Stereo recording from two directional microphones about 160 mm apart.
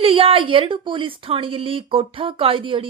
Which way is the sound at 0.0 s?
35° right (ahead or behind).